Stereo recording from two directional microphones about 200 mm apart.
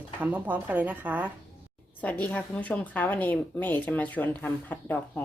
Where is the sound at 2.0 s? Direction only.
5° left (ahead or behind).